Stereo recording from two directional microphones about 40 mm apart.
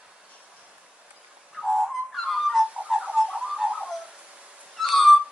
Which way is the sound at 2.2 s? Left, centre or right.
Centre.